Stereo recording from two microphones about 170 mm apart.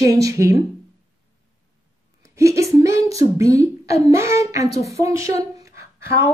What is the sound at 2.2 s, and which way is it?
A woman's voice, 20° right (ahead or behind).